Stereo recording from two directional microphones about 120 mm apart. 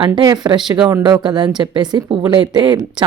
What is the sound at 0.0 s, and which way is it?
Speech, 35° right (ahead or behind).